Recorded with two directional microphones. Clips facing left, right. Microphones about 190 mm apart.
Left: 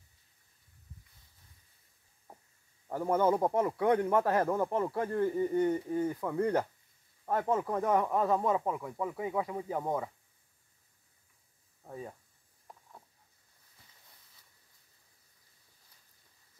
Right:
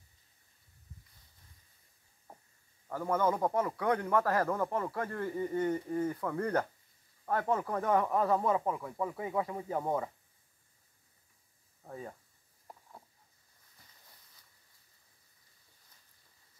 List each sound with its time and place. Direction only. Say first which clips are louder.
2.9 s speech: left 3 dB; 15° left (ahead or behind); by 10.1 s centre (ahead or behind)
11.9 s speech: left 1 dB; 5° left (ahead or behind)
12.7 s a sound: right 1 dB; 5° right (ahead or behind)